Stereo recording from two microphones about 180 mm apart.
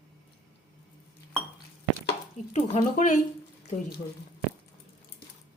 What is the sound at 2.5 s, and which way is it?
Speech, 40° left (ahead or behind).